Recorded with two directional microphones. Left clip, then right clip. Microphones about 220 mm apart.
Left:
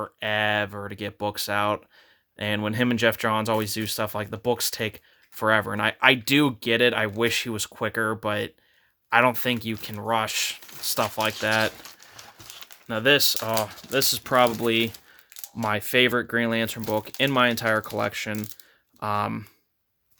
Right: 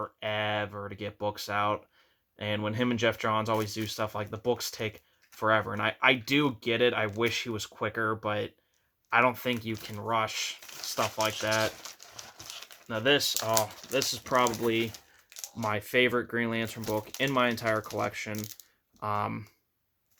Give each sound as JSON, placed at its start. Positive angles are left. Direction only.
{"t": 0.0, "sound": "speech", "side_deg": 50}
{"t": 12.9, "sound": "speech", "side_deg": 50}